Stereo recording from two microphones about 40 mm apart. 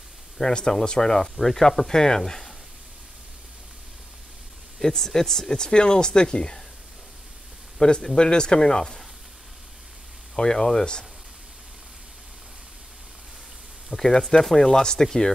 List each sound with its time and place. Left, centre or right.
0.4 s speech: centre
4.7 s speech: centre
7.8 s speech: centre
10.3 s speech: centre
14.1 s speech: centre